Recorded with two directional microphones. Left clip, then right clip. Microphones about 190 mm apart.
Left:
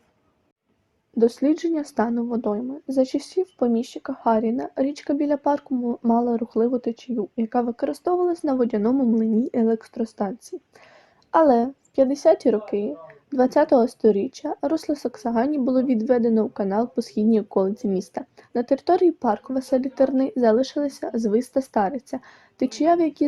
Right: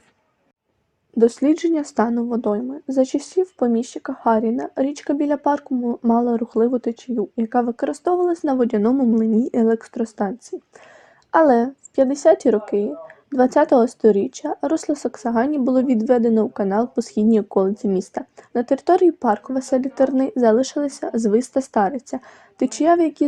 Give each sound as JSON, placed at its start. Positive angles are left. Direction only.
{"t": 1.2, "sound": "speech", "side_deg": -25}